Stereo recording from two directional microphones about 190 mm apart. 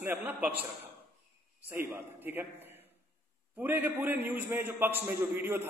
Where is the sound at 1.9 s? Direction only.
10° right (ahead or behind).